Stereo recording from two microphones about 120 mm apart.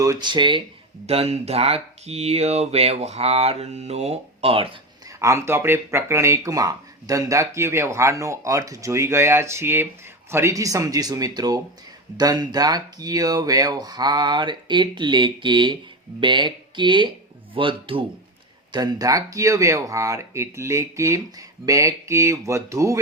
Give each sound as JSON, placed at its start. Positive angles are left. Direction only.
{"t": 0.0, "sound": "speech", "side_deg": -35}
{"t": 1.0, "sound": "speech", "side_deg": -60}
{"t": 5.2, "sound": "speech", "side_deg": -25}
{"t": 18.7, "sound": "speech", "side_deg": -35}